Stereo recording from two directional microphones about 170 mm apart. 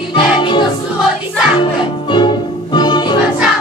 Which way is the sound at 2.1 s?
25° left (ahead or behind).